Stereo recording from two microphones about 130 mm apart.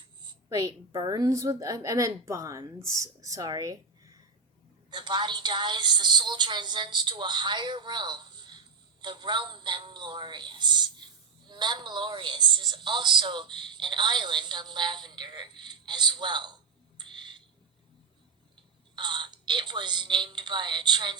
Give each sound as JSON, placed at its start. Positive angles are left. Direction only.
{"t": 0.4, "sound": "a woman's voice", "side_deg": -30}
{"t": 4.9, "sound": "a woman's voice", "side_deg": -35}
{"t": 17.0, "sound": "fire alarm", "side_deg": -35}
{"t": 18.9, "sound": "a woman's voice", "side_deg": -35}